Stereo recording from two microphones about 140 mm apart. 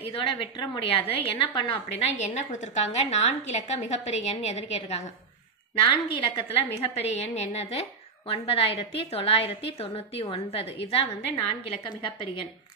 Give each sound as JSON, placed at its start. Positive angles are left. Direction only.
{"t": 0.0, "sound": "a woman's voice", "side_deg": 40}
{"t": 6.0, "sound": "a woman's voice", "side_deg": 40}
{"t": 6.7, "sound": "a woman's voice", "side_deg": 50}